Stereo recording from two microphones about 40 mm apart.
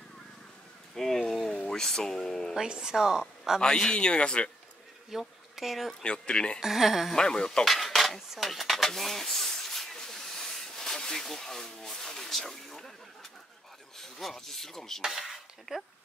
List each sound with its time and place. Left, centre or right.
0.9 s a sound: centre
1.7 s speech: centre
2.5 s a woman's voice: centre
3.6 s speech: centre
5.1 s a woman's voice: centre
6.0 s speech: left
6.6 s a woman's voice: centre
7.2 s speech: centre
7.6 s dishes: centre
8.5 s speech: centre
15.0 s a woman's voice: centre